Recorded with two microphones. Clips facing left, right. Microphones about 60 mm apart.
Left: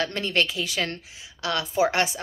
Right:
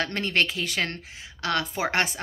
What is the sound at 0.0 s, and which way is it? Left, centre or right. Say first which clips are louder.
A woman's voice: even; right.